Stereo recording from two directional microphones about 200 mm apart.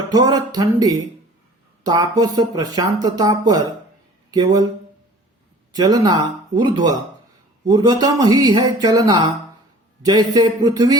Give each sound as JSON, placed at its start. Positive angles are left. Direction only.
{"t": 0.1, "sound": "speech", "side_deg": -20}
{"t": 5.7, "sound": "speech", "side_deg": -20}